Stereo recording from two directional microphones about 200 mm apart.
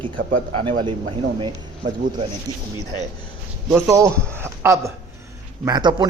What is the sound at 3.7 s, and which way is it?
A man's voice, 15° right (ahead or behind).